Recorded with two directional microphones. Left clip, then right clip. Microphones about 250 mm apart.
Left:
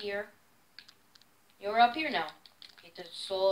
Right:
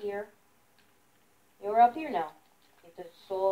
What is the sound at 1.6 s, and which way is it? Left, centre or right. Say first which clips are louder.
Speech: right 2 dB; left.